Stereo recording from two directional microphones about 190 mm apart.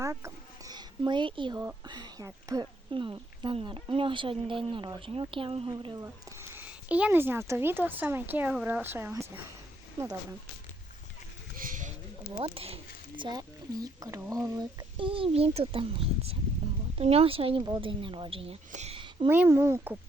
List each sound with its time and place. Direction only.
0.0 s a sound: 15° right (ahead or behind)
1.5 s speech: 20° right (ahead or behind)
6.5 s a woman's voice: 10° right (ahead or behind)
11.5 s a sound: 45° right (ahead or behind)
12.3 s speech: 30° right (ahead or behind)
19.3 s a woman's voice: 10° right (ahead or behind)